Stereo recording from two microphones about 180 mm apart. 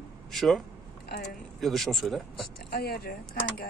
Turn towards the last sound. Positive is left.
turn(degrees=60)  # may be behind; listen again after turning